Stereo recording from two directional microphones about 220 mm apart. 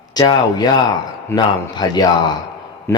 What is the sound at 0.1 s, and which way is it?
Speech, 20° left (ahead or behind).